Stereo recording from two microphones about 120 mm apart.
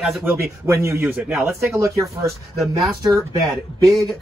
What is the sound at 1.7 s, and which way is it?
Speech, 25° right (ahead or behind).